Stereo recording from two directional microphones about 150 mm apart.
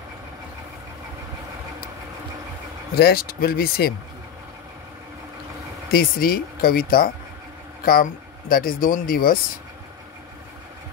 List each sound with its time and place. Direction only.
2.9 s speech: 90° left
5.9 s speech: 80° left